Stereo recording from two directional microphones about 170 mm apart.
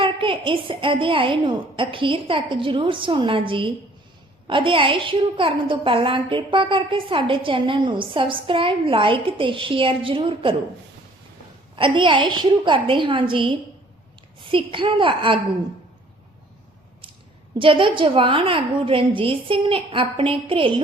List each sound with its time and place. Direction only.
0.0 s a woman's voice: 30° right (ahead or behind)
11.8 s a woman's voice: 30° right (ahead or behind)
17.6 s a woman's voice: 30° right (ahead or behind)